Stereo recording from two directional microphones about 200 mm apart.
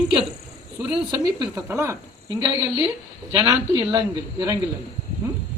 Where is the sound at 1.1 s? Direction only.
20° right (ahead or behind).